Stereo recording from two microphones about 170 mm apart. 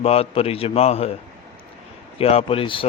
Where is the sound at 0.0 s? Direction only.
35° left (ahead or behind).